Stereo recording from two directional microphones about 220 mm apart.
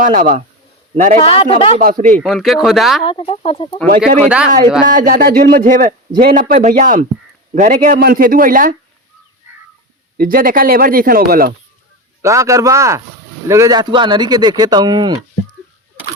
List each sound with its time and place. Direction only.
0.0 s speech: 35° right (ahead or behind)
1.2 s speech: 25° left (ahead or behind)
1.8 s speech: 35° right (ahead or behind)
2.2 s speech: centre (ahead or behind)
3.0 s speech: 25° left (ahead or behind)
4.2 s speech: 5° right (ahead or behind)
4.9 s speech: 35° right (ahead or behind)
10.2 s speech: 40° right (ahead or behind)
12.2 s a man's voice: 15° right (ahead or behind)